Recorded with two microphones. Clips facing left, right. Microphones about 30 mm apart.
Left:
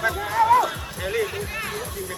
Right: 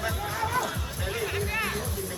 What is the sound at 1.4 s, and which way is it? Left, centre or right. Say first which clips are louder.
Music: right 1 dB; centre.